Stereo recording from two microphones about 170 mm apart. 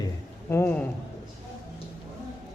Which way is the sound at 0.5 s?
10° left (ahead or behind).